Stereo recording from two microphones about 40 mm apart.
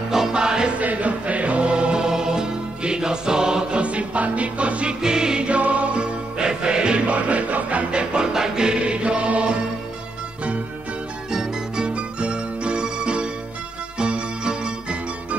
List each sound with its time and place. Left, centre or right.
0.1 s music: centre
0.7 s music: right; by 3.8 s centre
3.8 s music: right
5.0 s music: centre
5.6 s music: right
5.9 s music: right
7.1 s music: right
7.9 s music: right
11.3 s music: right